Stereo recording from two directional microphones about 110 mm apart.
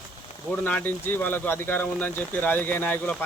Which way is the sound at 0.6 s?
15° left (ahead or behind).